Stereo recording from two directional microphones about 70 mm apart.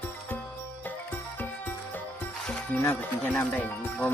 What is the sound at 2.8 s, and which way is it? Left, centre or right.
Speech, left.